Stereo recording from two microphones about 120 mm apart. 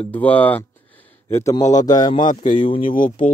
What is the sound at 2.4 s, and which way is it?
Speech, 90° left.